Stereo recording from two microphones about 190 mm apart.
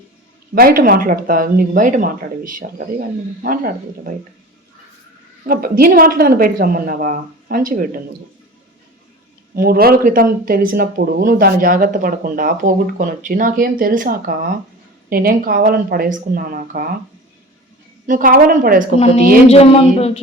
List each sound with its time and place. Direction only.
0.5 s speech: 50° right (ahead or behind)
5.5 s speech: 50° right (ahead or behind)
9.6 s speech: 50° right (ahead or behind)
18.0 s speech: 45° right (ahead or behind)
19.5 s speech: 30° left (ahead or behind)